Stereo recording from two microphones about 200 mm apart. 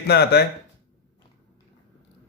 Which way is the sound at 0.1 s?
55° left (ahead or behind).